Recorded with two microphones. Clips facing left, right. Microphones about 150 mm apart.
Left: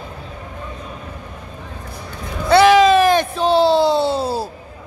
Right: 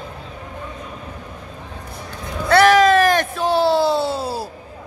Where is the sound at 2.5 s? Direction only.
15° left (ahead or behind).